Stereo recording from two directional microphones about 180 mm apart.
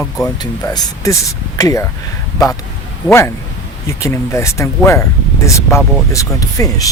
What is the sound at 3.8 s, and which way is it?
Speech, 15° left (ahead or behind).